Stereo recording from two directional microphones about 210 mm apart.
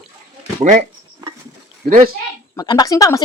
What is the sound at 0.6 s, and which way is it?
Speech, 35° right (ahead or behind).